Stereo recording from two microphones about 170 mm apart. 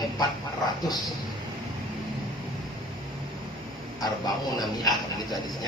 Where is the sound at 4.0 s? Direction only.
25° left (ahead or behind).